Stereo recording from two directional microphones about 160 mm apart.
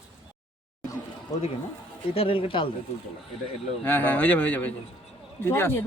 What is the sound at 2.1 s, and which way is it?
Speech, 35° left (ahead or behind).